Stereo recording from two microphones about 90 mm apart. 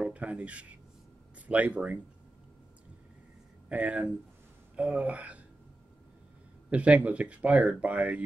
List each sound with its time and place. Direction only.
0.0 s speech: 15° right (ahead or behind)
3.6 s speech: 15° right (ahead or behind)
6.7 s speech: 15° right (ahead or behind)